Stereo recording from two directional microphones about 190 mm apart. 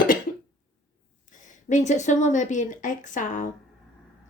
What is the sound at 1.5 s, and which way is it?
A woman's voice, 40° left (ahead or behind).